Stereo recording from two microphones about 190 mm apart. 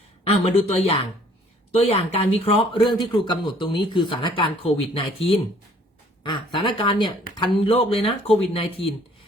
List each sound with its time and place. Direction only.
0.3 s speech: 35° left (ahead or behind)